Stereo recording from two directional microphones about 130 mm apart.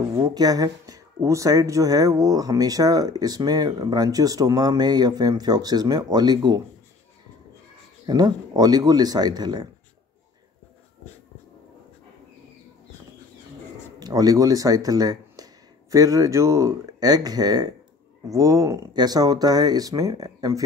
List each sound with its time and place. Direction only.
0.1 s speech: 30° right (ahead or behind)
8.1 s speech: 30° right (ahead or behind)
13.9 s speech: 30° right (ahead or behind)